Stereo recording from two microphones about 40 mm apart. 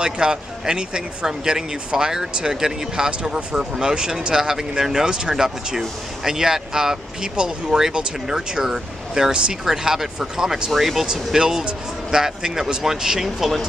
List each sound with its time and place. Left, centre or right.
0.0 s speech: centre
11.1 s speech: centre